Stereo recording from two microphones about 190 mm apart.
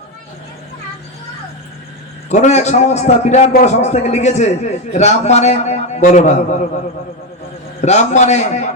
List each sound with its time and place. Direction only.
2.3 s a man's voice: 35° left (ahead or behind)
7.8 s a man's voice: 35° left (ahead or behind)